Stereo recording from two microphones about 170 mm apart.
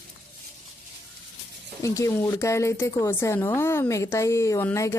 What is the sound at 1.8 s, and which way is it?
A woman's voice, 20° left (ahead or behind).